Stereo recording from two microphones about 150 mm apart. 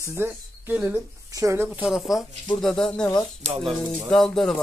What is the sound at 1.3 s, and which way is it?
Speech, 20° right (ahead or behind).